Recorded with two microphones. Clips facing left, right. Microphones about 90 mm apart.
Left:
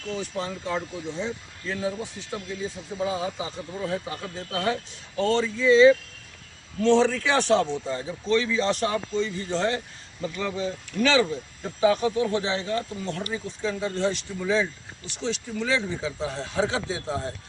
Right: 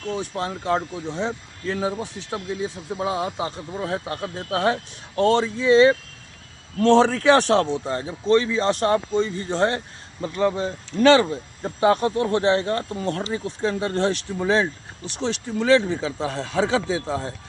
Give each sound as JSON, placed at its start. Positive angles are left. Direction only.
{"t": 0.1, "sound": "speech", "side_deg": -55}
{"t": 8.4, "sound": "a man's voice", "side_deg": -40}